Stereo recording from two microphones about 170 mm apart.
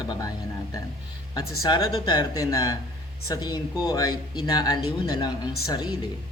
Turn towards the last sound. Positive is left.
turn(degrees=25)  # may be behind; listen again after turning